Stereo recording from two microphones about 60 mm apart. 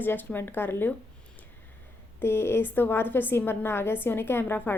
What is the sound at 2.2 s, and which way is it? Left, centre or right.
Speech, left.